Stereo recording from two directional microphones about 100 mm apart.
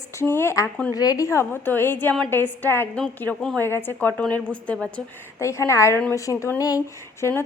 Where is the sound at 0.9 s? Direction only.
35° left (ahead or behind).